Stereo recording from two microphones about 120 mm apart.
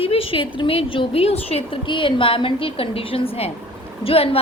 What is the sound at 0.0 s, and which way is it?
A woman's voice, 50° left (ahead or behind).